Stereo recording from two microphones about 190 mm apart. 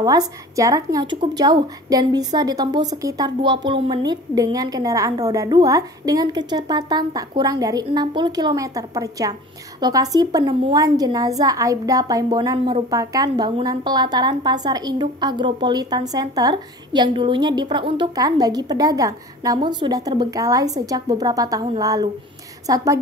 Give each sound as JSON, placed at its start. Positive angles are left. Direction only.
{"t": 0.0, "sound": "a woman's voice", "side_deg": -20}